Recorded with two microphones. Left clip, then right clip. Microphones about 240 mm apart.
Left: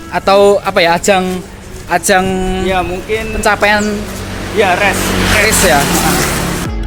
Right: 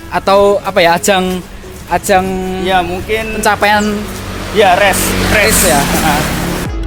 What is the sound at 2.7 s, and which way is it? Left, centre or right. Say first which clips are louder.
Speech: right 4 dB; right.